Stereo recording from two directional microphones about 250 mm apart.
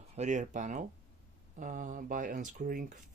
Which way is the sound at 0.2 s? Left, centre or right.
Right.